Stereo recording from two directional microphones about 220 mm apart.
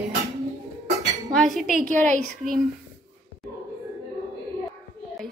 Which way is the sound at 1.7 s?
35° right (ahead or behind).